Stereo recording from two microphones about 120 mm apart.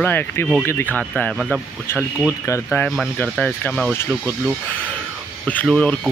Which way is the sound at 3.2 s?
10° left (ahead or behind).